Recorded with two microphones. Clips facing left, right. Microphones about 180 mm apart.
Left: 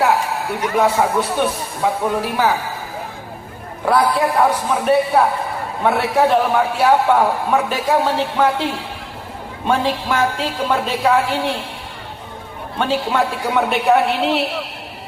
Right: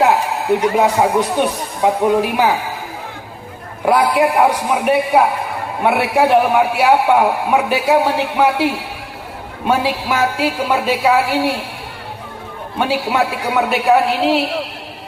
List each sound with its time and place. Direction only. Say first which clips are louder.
0.0 s a man's voice: right 3 dB; 20° right (ahead or behind)
3.8 s a man's voice: right 2 dB; 10° right (ahead or behind)
12.8 s a man's voice: right 1 dB; 10° right (ahead or behind)